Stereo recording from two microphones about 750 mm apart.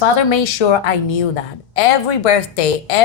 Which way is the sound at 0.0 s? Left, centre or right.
Left.